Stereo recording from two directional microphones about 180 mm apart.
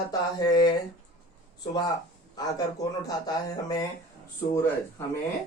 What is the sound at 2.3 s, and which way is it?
A man's voice, 20° left (ahead or behind).